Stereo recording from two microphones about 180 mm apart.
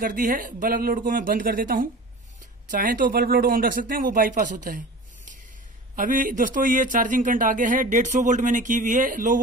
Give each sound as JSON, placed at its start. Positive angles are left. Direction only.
{"t": 0.0, "sound": "a man's voice", "side_deg": -50}